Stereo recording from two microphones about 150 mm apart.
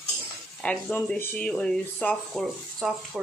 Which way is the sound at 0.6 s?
10° left (ahead or behind).